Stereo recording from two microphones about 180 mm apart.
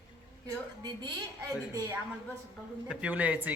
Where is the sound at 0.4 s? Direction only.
25° right (ahead or behind).